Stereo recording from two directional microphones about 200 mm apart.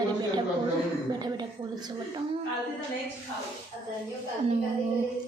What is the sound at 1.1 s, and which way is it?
Speech, 20° right (ahead or behind).